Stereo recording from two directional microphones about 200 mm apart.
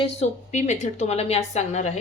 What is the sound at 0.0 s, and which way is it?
Speech, 35° left (ahead or behind).